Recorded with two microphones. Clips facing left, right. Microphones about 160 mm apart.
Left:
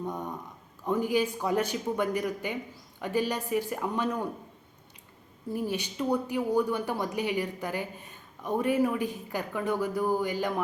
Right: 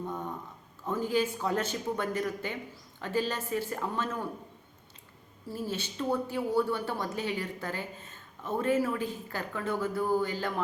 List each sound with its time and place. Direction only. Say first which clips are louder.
0.1 s a sound: left 1 dB; 15° left (ahead or behind)
0.9 s speech: left 2 dB; 15° left (ahead or behind)
5.5 s speech: left 4 dB; 15° left (ahead or behind)